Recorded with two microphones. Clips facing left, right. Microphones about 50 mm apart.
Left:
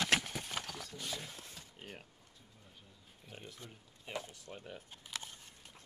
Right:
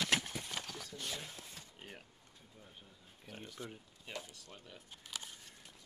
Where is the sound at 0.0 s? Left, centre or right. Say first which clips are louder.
Left 2 dB; left.